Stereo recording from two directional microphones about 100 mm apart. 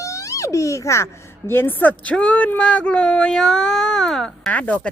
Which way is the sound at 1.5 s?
20° left (ahead or behind).